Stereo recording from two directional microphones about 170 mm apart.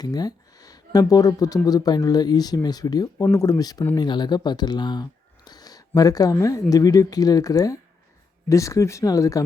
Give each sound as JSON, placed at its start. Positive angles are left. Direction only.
{"t": 0.0, "sound": "speech", "side_deg": 20}
{"t": 5.5, "sound": "a sound", "side_deg": 20}
{"t": 6.4, "sound": "speech", "side_deg": 20}